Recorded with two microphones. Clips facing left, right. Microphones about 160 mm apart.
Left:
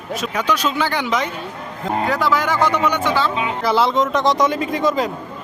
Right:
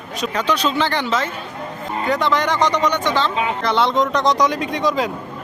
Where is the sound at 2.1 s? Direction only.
5° left (ahead or behind).